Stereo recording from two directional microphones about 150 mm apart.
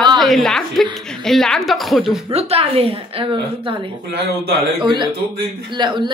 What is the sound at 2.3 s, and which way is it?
Speech, 40° right (ahead or behind).